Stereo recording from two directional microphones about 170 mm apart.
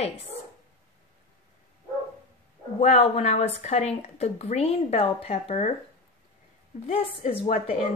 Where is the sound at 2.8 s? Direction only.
40° left (ahead or behind).